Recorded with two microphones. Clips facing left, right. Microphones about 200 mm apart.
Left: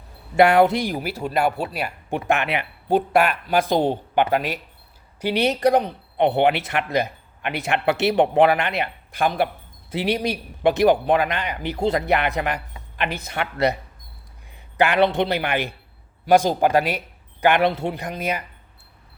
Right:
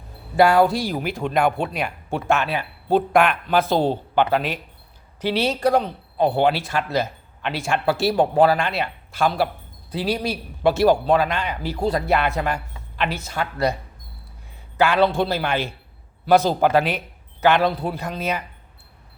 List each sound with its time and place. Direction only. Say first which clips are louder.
0.3 s speech: left 1 dB; 20° left (ahead or behind); by 1.9 s 5° left (ahead or behind)
2.0 s speech: even; 15° left (ahead or behind)
3.2 s speech: right 1 dB; 10° left (ahead or behind)
13.1 s speech: left 1 dB; 60° left (ahead or behind)
14.8 s speech: even; 15° left (ahead or behind)